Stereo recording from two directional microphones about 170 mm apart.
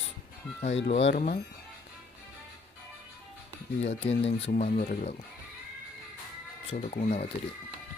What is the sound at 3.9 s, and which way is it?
Speech, 40° left (ahead or behind).